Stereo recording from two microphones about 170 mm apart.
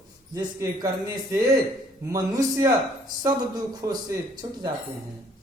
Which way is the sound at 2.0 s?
20° right (ahead or behind).